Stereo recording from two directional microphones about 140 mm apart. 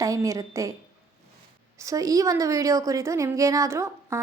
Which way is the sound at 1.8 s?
25° right (ahead or behind).